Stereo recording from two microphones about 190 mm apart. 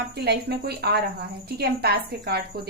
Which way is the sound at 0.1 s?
60° right (ahead or behind).